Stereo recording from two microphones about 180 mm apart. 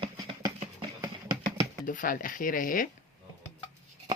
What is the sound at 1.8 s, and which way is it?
Speech, 50° left (ahead or behind).